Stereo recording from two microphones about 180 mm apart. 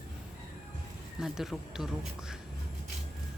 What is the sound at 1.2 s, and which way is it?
Speech, centre (ahead or behind).